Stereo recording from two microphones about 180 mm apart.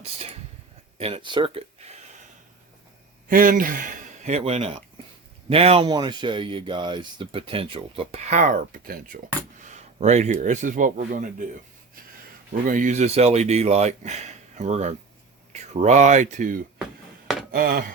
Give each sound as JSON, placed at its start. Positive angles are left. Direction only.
{"t": 0.0, "sound": "speech", "side_deg": -35}
{"t": 3.2, "sound": "speech", "side_deg": -50}
{"t": 9.6, "sound": "speech", "side_deg": -40}
{"t": 12.6, "sound": "speech", "side_deg": -45}
{"t": 17.5, "sound": "chopping", "side_deg": -55}